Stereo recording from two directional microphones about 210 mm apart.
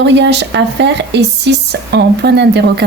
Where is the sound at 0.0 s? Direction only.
55° right (ahead or behind).